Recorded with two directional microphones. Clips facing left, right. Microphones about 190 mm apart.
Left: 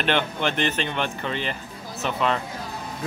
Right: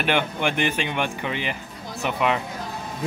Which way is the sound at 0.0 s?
10° right (ahead or behind).